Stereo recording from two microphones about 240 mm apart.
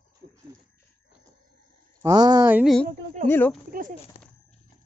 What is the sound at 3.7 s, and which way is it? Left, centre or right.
Speech, right.